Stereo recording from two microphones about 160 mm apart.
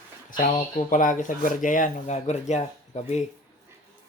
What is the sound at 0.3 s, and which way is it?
Speech, 55° left (ahead or behind).